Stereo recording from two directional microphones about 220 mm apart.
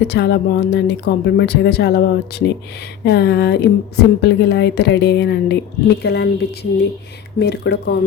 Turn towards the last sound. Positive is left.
turn(degrees=45)  # may be behind; listen again after turning